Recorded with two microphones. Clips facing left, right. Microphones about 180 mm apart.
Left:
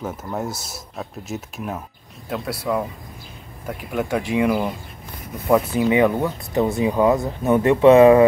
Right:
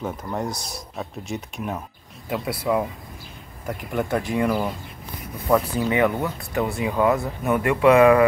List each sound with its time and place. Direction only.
0.0 s speech: 5° left (ahead or behind)
3.6 s speech: 5° left (ahead or behind); by 8.2 s 25° left (ahead or behind)